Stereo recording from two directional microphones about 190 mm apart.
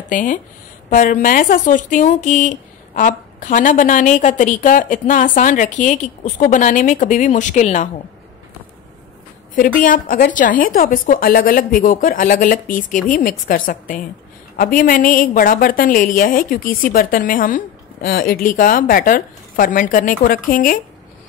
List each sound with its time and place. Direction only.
0.1 s speech: 45° left (ahead or behind)
9.8 s speech: 50° left (ahead or behind)